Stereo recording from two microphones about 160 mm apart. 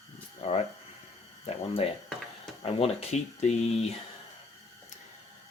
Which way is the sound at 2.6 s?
40° left (ahead or behind).